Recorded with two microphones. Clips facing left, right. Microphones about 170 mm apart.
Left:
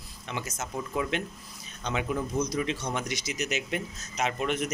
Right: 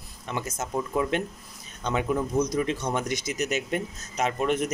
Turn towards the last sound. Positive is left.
turn(degrees=-45)  # may be behind; listen again after turning